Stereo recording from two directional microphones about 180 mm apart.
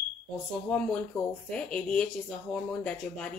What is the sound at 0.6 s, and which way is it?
Speech, 5° left (ahead or behind).